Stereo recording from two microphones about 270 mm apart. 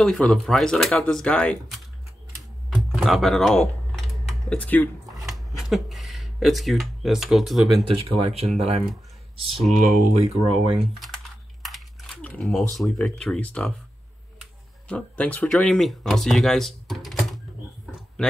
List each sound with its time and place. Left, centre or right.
0.0 s speech: centre
2.7 s typing: centre
7.8 s speech: right
9.8 s speech: right
10.8 s speech: centre
11.6 s a sound: centre
12.7 s speech: centre